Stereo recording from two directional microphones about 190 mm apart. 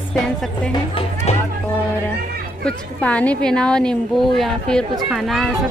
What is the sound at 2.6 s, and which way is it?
A woman's voice, 5° left (ahead or behind).